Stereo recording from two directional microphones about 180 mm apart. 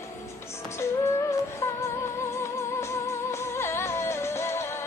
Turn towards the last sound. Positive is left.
turn(degrees=15)  # may be behind; listen again after turning